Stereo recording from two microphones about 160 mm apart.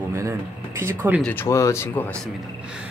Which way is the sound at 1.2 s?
10° left (ahead or behind).